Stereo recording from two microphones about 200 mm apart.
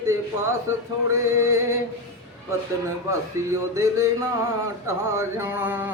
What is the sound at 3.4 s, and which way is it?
Male singing, 15° right (ahead or behind).